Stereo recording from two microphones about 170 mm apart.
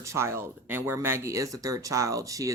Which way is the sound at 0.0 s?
15° right (ahead or behind).